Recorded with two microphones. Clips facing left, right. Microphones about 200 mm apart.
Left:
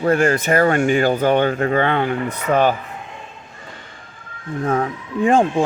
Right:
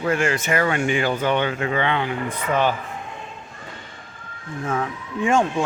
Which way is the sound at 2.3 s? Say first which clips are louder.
Left 3 dB; 70° left (ahead or behind).